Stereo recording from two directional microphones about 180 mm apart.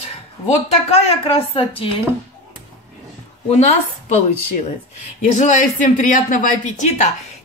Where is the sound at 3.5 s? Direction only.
40° left (ahead or behind).